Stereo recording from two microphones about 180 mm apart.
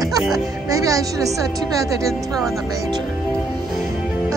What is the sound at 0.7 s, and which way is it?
A woman's voice, 20° right (ahead or behind).